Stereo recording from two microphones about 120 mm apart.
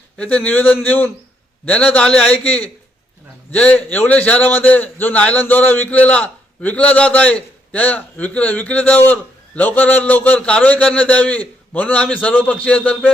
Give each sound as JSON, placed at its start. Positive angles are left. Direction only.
{"t": 0.2, "sound": "a man's voice", "side_deg": 10}